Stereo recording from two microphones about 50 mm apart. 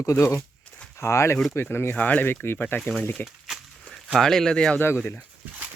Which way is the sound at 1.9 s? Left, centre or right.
Left.